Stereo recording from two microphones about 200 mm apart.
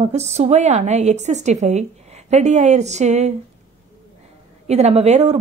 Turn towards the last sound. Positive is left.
turn(degrees=-35)  # may be behind; listen again after turning